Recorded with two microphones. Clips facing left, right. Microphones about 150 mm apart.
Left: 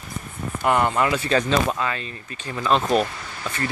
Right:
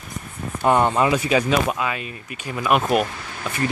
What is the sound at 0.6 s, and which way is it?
Speech, 20° right (ahead or behind).